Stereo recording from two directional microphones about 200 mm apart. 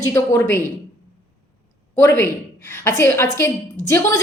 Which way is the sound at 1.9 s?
15° left (ahead or behind).